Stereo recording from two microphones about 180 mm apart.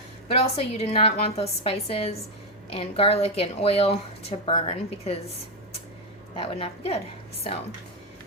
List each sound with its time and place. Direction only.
0.3 s a woman's voice: 35° left (ahead or behind)
6.3 s a woman's voice: 30° left (ahead or behind)